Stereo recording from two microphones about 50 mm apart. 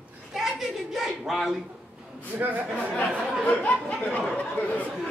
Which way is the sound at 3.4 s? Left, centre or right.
Left.